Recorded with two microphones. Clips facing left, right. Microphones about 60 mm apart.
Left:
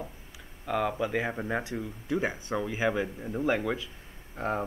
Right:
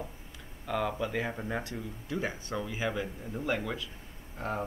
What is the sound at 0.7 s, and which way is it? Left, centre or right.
Speech, centre.